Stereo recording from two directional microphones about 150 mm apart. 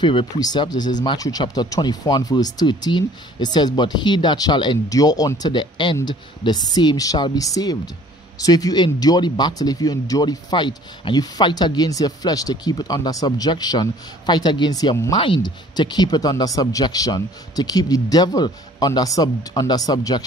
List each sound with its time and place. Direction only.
0.0 s speech: 35° left (ahead or behind)